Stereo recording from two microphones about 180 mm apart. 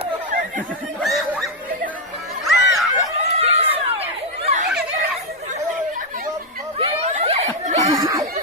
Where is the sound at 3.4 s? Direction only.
35° right (ahead or behind).